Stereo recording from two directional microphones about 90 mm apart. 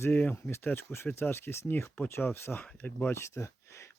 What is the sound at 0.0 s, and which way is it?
Speech, 20° left (ahead or behind).